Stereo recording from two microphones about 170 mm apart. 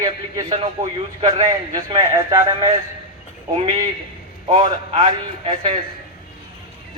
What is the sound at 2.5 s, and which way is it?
Speech, 30° right (ahead or behind).